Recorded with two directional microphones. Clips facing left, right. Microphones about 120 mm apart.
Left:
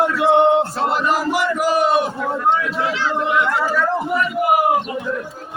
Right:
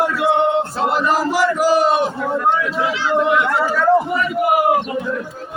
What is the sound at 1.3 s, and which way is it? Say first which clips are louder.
Chant: right 3 dB; 35° right (ahead or behind).